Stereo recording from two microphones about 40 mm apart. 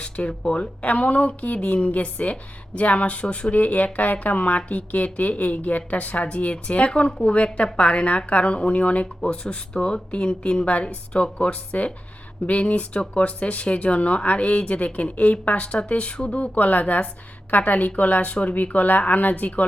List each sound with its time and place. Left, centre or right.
0.0 s speech: left
3.5 s speech: left
15.6 s speech: left
16.6 s speech: left